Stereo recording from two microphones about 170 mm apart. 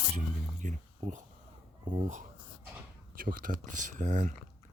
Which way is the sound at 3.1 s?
55° right (ahead or behind).